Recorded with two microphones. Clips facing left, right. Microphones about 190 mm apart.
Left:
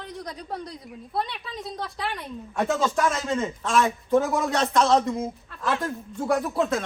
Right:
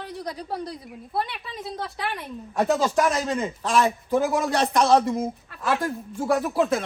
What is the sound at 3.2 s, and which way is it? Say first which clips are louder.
Speech: right 1 dB; 15° right (ahead or behind).